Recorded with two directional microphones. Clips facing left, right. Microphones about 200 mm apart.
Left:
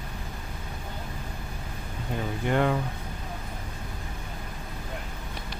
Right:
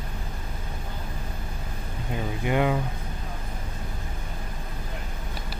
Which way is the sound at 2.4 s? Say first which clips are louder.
Right 1 dB; 10° right (ahead or behind).